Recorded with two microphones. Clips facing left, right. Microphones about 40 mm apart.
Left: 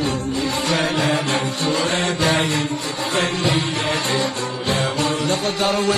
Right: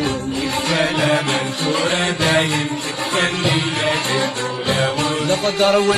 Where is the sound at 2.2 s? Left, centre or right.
Right.